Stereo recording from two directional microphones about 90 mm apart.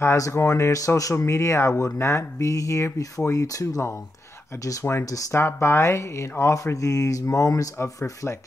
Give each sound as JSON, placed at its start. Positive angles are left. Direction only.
{"t": 0.0, "sound": "speech", "side_deg": 30}